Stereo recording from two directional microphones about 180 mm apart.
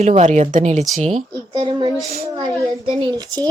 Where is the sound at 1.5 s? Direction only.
25° right (ahead or behind).